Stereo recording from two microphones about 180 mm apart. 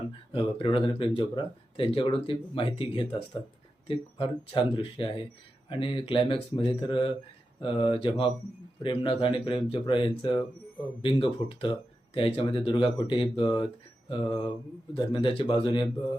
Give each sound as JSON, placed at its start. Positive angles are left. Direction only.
{"t": 0.3, "sound": "speech", "side_deg": 30}